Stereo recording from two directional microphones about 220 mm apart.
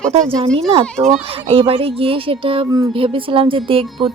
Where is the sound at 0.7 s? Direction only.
25° right (ahead or behind).